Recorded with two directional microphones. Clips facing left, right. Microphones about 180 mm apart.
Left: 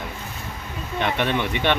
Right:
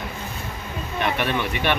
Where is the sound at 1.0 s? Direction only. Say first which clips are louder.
Left 1 dB; 20° left (ahead or behind).